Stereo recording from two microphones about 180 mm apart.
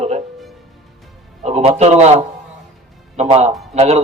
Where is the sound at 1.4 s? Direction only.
35° right (ahead or behind).